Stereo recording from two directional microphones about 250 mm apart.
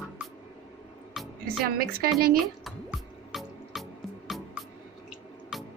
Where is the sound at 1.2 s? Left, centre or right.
Centre.